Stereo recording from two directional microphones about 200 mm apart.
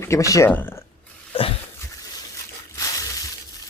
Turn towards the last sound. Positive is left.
turn(degrees=15)  # may be behind; listen again after turning